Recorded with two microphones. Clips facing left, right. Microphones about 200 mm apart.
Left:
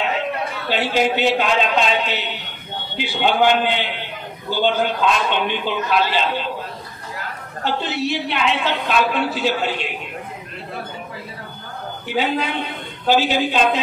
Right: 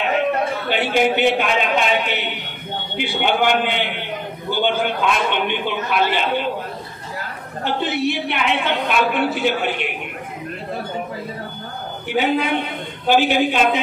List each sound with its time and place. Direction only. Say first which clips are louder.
0.7 s a woman's voice: left 1 dB; 55° right (ahead or behind)
7.6 s a woman's voice: right 2 dB; 55° right (ahead or behind)
12.1 s a woman's voice: right 3 dB; 55° right (ahead or behind)